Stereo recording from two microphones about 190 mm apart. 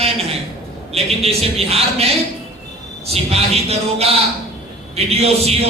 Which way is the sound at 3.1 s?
35° right (ahead or behind).